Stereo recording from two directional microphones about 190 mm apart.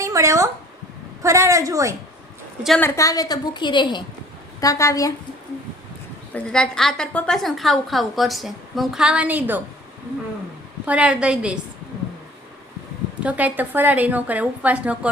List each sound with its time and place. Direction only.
0.0 s a woman's voice: 15° right (ahead or behind)
2.6 s a woman's voice: 5° left (ahead or behind)
2.9 s a woman's voice: 15° left (ahead or behind)
6.3 s a woman's voice: 5° left (ahead or behind)
10.8 s a woman's voice: 5° right (ahead or behind)
13.2 s a woman's voice: 10° right (ahead or behind)